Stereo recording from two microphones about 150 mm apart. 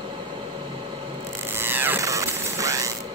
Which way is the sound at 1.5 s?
15° right (ahead or behind).